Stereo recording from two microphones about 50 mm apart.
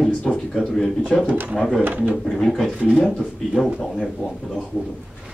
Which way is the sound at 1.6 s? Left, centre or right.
Centre.